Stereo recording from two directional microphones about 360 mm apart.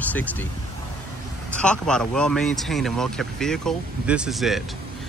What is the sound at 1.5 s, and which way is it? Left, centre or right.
Speech, centre.